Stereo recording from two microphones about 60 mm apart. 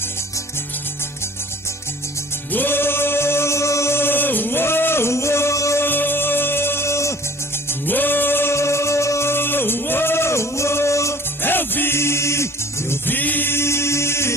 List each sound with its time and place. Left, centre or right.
2.5 s singing: left
5.8 s music: left
7.8 s music: left
9.3 s music: left
11.4 s music: left
12.9 s music: left